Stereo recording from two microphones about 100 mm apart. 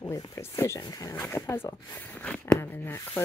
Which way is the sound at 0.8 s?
40° left (ahead or behind).